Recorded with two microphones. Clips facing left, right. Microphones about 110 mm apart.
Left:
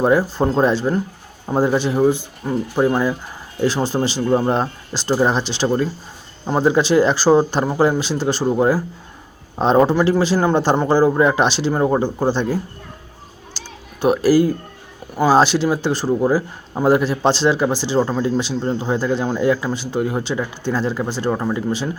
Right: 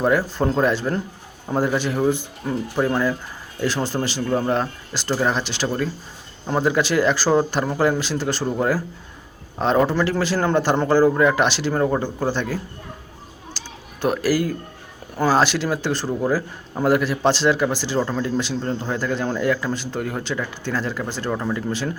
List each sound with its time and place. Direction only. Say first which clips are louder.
0.0 s speech: left 3 dB; 20° left (ahead or behind)
14.0 s speech: left 6 dB; 20° left (ahead or behind)